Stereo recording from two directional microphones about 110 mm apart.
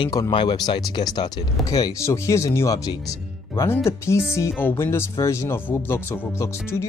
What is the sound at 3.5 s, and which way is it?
Speech, 20° left (ahead or behind).